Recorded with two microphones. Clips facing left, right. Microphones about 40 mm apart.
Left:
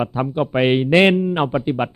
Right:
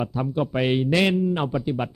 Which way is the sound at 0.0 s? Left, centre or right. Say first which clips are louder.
Left 4 dB; left.